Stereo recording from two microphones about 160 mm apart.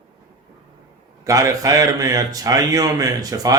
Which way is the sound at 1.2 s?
20° right (ahead or behind).